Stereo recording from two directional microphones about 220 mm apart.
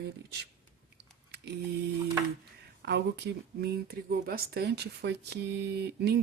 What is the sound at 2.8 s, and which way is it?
Speech, 50° right (ahead or behind).